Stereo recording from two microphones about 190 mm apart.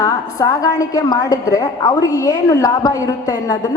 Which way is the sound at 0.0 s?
15° left (ahead or behind).